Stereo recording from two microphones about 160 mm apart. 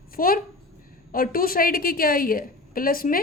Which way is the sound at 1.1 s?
65° left (ahead or behind).